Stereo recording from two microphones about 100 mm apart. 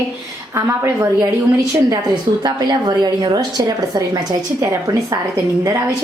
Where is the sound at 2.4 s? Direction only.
45° right (ahead or behind).